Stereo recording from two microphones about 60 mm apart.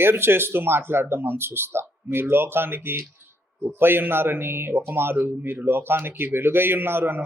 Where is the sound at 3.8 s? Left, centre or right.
Right.